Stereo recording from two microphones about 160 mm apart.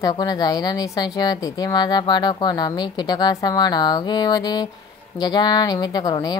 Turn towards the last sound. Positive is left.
turn(degrees=25)  # may be behind; listen again after turning